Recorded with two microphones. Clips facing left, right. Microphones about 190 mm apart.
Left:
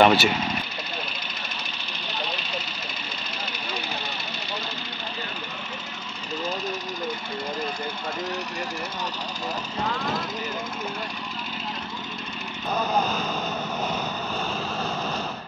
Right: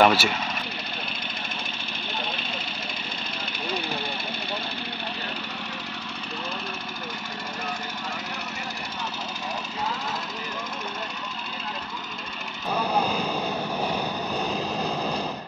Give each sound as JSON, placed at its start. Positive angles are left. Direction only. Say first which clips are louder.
{"t": 0.0, "sound": "speech", "louder": "left 2 dB", "side_deg": 0}
{"t": 12.9, "sound": "vehicle", "louder": "right 1 dB", "side_deg": -10}